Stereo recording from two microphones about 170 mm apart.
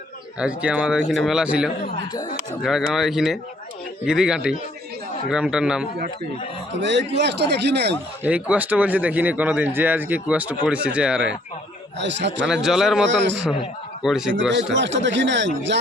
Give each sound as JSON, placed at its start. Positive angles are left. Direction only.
{"t": 0.3, "sound": "speech", "side_deg": -5}
{"t": 6.7, "sound": "a man's voice", "side_deg": -90}
{"t": 8.2, "sound": "speech", "side_deg": -10}
{"t": 11.9, "sound": "speech", "side_deg": -90}
{"t": 12.5, "sound": "speech", "side_deg": -5}
{"t": 13.1, "sound": "speech", "side_deg": -90}
{"t": 14.0, "sound": "speech", "side_deg": 0}
{"t": 14.7, "sound": "speech", "side_deg": -90}